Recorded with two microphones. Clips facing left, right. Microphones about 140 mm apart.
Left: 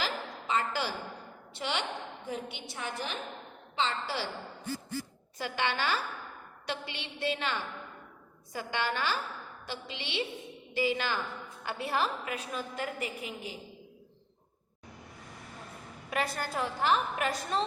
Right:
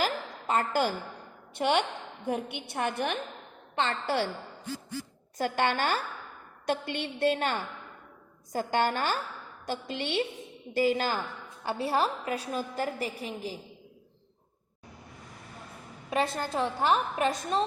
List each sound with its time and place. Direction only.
0.0 s a sound: 50° right (ahead or behind)
1.5 s a woman's voice: 50° right (ahead or behind)
5.4 s a woman's voice: 45° right (ahead or behind)
16.0 s a woman's voice: 25° right (ahead or behind)